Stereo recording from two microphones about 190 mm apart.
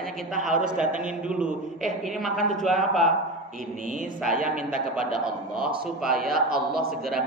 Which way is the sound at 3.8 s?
45° right (ahead or behind).